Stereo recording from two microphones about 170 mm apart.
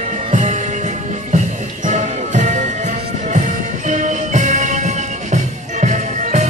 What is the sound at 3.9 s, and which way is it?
Music, 45° right (ahead or behind).